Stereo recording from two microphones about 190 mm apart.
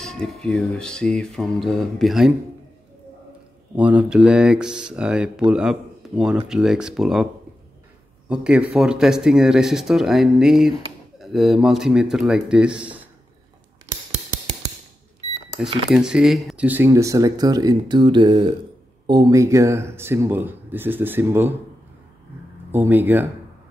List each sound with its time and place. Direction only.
0.0 s speech: 5° left (ahead or behind)
3.7 s speech: 5° right (ahead or behind)
8.3 s speech: 5° right (ahead or behind)
15.9 s speech: 5° right (ahead or behind)
22.7 s speech: 10° right (ahead or behind)